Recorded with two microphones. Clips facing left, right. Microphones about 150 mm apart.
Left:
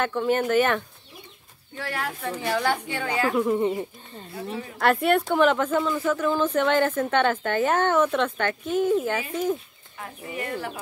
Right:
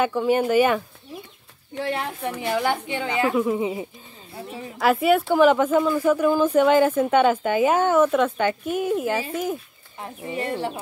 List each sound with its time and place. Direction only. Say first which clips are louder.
0.0 s speech: right 3 dB; 10° right (ahead or behind)
1.8 s speech: right 4 dB; 20° right (ahead or behind)
3.3 s speech: even; 5° right (ahead or behind)
9.9 s speech: right 4 dB; 25° right (ahead or behind)